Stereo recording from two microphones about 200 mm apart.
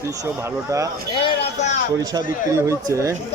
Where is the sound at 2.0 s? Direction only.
20° right (ahead or behind).